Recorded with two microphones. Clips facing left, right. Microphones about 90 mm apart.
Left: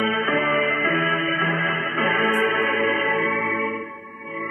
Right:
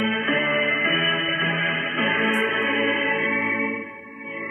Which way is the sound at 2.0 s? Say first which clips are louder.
Left 2 dB; 35° left (ahead or behind).